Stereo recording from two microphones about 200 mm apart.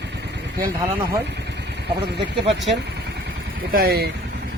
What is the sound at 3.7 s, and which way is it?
Speech, 50° right (ahead or behind).